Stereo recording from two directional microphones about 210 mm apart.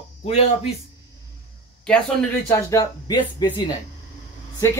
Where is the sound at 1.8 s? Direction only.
5° left (ahead or behind); by 3.7 s 20° left (ahead or behind).